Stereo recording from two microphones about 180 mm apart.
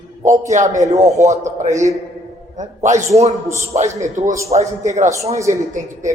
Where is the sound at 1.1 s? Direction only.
40° right (ahead or behind).